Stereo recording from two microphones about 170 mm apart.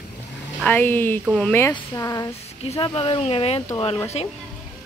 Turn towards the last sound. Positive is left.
turn(degrees=35)  # may be behind; listen again after turning